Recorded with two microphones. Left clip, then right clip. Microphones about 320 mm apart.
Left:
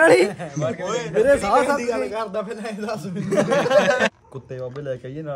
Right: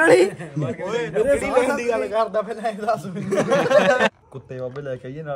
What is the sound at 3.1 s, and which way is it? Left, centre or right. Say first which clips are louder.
A man's voice: left 3 dB; centre.